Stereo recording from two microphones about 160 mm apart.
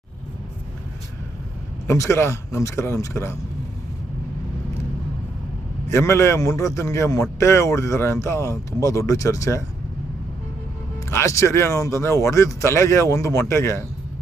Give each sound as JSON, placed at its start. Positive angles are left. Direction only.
{"t": 1.9, "sound": "speech", "side_deg": 20}
{"t": 5.9, "sound": "a man's voice", "side_deg": 20}
{"t": 11.1, "sound": "speech", "side_deg": 15}